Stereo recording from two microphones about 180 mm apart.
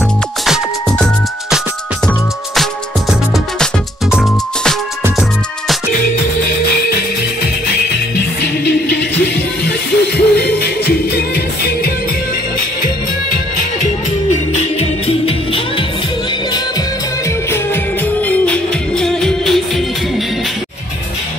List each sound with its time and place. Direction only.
0.5 s music: 5° left (ahead or behind)
8.4 s music: 65° left (ahead or behind)
14.8 s music: 35° left (ahead or behind)
18.2 s music: 5° left (ahead or behind)